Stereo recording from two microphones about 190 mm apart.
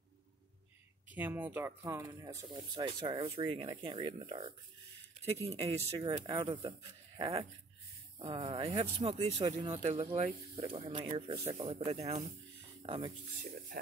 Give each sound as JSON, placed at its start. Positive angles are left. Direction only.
{"t": 1.1, "sound": "speech", "side_deg": -10}
{"t": 8.2, "sound": "speech", "side_deg": -30}